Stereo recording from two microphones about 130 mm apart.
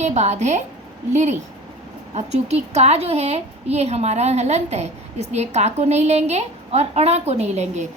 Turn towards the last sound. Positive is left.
turn(degrees=-60)  # may be behind; listen again after turning